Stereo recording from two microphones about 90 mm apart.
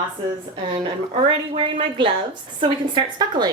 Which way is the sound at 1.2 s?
70° right (ahead or behind).